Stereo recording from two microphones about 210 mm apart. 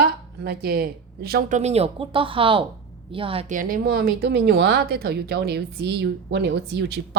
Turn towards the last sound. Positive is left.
turn(degrees=-50)  # may be behind; listen again after turning